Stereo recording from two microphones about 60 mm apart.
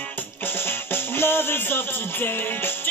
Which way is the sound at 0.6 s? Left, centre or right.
Left.